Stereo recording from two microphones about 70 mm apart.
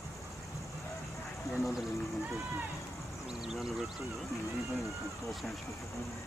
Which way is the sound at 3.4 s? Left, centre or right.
Centre.